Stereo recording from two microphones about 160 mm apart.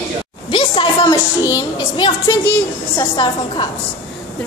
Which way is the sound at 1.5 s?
20° left (ahead or behind).